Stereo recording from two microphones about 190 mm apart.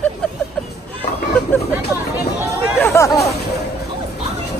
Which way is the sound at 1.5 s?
10° left (ahead or behind).